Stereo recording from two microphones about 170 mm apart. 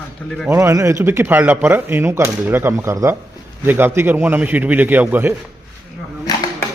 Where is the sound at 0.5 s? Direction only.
15° right (ahead or behind).